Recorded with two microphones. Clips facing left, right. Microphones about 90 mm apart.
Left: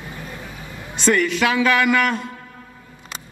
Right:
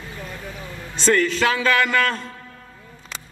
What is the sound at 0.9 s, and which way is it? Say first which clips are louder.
A man's voice: even; 15° left (ahead or behind).